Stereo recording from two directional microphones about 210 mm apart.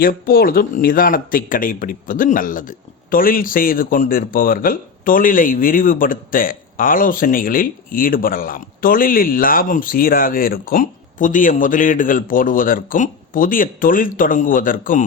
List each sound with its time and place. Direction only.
0.0 s speech: 45° left (ahead or behind)